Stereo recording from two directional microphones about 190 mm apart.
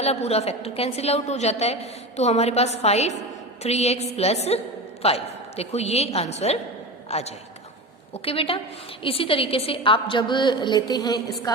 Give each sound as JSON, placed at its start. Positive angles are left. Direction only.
{"t": 0.0, "sound": "a woman's voice", "side_deg": 35}